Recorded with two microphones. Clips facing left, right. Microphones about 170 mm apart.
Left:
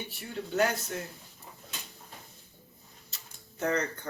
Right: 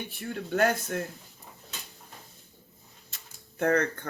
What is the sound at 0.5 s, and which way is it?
Speech, 55° right (ahead or behind).